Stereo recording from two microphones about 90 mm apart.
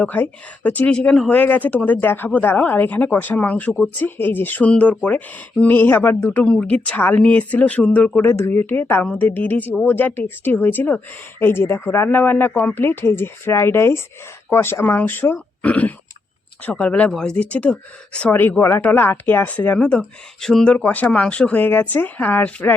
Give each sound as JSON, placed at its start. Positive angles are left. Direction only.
{"t": 0.0, "sound": "speech", "side_deg": 20}
{"t": 20.0, "sound": "speech", "side_deg": 5}
{"t": 20.7, "sound": "speech", "side_deg": 15}